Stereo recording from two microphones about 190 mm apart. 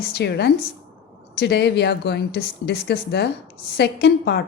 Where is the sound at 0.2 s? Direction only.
60° left (ahead or behind).